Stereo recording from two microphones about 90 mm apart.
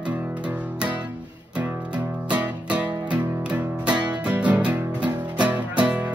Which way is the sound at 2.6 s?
15° right (ahead or behind).